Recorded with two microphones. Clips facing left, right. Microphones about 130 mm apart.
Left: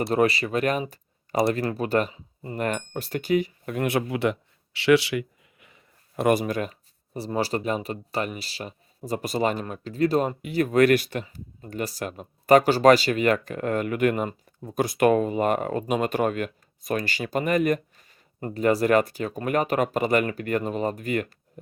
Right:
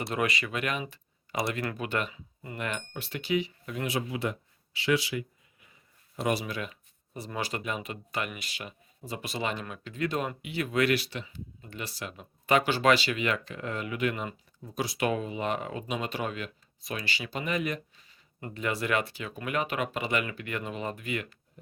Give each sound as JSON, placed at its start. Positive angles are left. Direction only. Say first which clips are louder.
{"t": 0.1, "sound": "speech", "louder": "left 8 dB", "side_deg": 35}
{"t": 6.2, "sound": "speech", "louder": "left 8 dB", "side_deg": 50}